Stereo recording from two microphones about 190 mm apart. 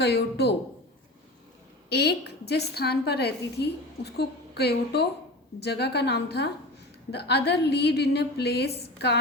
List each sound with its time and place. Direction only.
0.0 s a woman's voice: 60° left (ahead or behind)
1.9 s a woman's voice: 60° left (ahead or behind)